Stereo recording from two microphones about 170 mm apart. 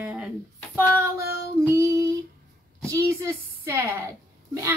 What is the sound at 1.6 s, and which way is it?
A woman's voice, 15° right (ahead or behind).